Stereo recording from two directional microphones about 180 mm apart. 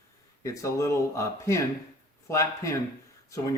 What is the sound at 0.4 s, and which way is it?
Speech, 15° left (ahead or behind).